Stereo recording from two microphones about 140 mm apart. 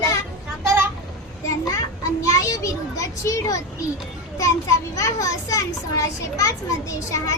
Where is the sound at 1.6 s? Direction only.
20° left (ahead or behind).